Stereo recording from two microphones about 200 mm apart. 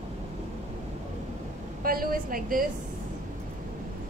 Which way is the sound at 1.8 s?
45° right (ahead or behind).